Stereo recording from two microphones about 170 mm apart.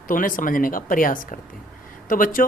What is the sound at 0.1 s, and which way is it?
Speech, 55° left (ahead or behind).